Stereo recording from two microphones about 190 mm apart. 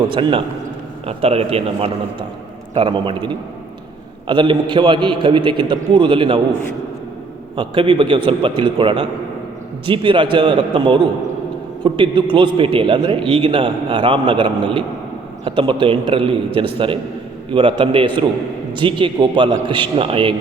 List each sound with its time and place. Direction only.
0.1 s a man's voice: 25° right (ahead or behind)
7.5 s a man's voice: 25° right (ahead or behind)